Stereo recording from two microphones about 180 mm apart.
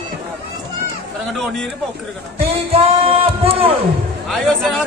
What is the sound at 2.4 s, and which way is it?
Music, 35° right (ahead or behind).